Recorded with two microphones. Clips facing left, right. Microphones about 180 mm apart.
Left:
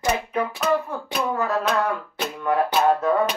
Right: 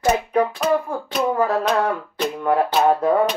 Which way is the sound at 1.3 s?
30° right (ahead or behind).